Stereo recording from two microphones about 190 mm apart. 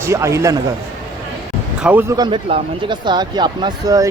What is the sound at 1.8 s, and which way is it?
Speech, 10° right (ahead or behind).